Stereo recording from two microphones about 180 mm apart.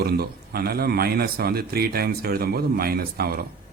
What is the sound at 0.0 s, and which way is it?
A man's voice, 60° right (ahead or behind).